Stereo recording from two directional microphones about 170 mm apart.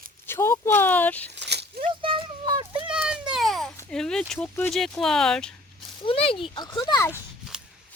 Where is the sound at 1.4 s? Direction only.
80° right.